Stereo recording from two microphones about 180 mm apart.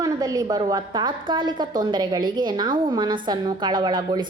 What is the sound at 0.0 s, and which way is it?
A woman's voice, 20° right (ahead or behind).